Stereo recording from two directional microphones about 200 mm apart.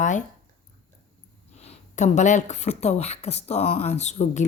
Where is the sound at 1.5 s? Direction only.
35° left (ahead or behind).